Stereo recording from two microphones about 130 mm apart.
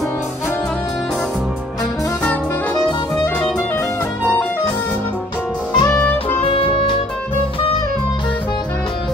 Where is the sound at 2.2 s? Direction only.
10° left (ahead or behind).